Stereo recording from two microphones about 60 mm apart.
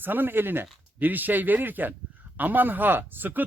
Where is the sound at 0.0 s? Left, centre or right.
Right.